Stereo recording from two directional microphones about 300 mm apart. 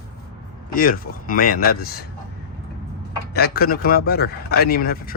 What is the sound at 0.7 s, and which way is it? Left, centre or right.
Speech, left.